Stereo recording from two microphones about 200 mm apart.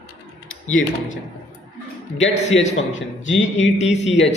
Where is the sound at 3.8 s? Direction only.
35° left (ahead or behind).